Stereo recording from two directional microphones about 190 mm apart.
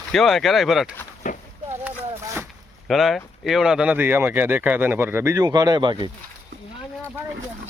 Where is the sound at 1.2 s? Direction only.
40° left (ahead or behind).